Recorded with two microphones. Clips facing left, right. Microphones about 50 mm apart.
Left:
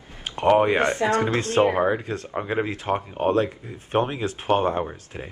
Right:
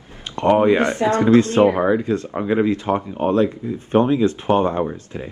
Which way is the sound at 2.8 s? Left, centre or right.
Centre.